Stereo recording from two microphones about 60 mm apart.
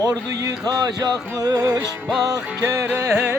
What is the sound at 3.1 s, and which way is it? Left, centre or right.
Music, right.